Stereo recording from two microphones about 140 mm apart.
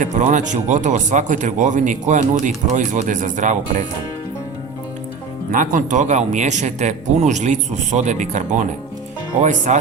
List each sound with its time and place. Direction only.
0.0 s speech: 60° right (ahead or behind)
5.5 s speech: 70° right (ahead or behind)